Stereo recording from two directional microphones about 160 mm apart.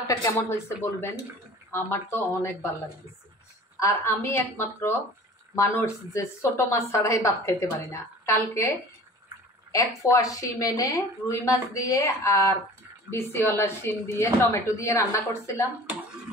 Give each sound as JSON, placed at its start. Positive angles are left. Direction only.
{"t": 0.0, "sound": "a woman's voice", "side_deg": 20}
{"t": 3.8, "sound": "a woman's voice", "side_deg": 15}